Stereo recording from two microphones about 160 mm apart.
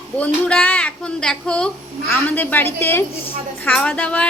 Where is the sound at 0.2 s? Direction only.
10° left (ahead or behind).